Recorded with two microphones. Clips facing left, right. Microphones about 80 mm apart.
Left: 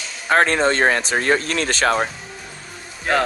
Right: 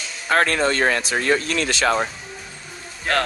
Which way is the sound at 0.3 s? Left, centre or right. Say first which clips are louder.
Left 2 dB; left.